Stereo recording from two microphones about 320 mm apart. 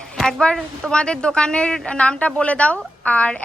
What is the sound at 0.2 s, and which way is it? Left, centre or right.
A woman's voice, centre.